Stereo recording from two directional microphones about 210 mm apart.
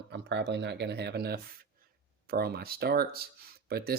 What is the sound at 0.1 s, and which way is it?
Speech, 55° right (ahead or behind).